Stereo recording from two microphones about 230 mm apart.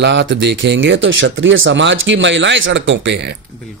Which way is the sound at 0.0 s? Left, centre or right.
Right.